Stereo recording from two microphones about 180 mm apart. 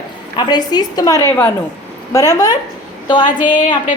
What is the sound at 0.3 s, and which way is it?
A woman's voice, 25° left (ahead or behind).